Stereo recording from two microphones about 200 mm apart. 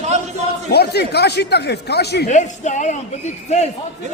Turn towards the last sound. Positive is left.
turn(degrees=35)  # may be behind; listen again after turning